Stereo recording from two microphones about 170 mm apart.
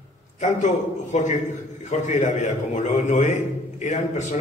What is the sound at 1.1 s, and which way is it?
A man's voice, 45° left (ahead or behind).